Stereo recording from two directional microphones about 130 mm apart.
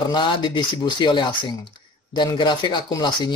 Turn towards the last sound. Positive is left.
turn(degrees=35)  # may be behind; listen again after turning